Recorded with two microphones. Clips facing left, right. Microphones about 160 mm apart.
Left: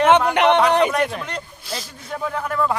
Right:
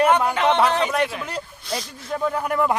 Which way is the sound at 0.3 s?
65° left (ahead or behind).